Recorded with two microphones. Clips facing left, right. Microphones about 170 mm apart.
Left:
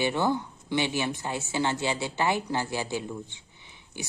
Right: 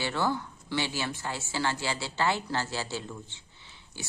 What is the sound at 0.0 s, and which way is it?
Speech, 20° left (ahead or behind).